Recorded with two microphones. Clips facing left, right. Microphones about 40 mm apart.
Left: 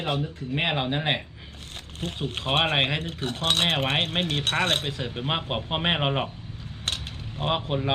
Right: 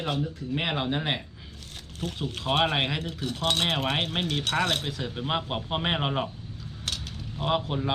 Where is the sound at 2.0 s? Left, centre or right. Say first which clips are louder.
Left 1 dB; left.